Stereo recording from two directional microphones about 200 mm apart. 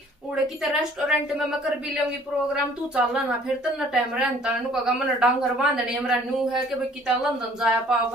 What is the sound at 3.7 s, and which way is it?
A woman's voice, 5° right (ahead or behind).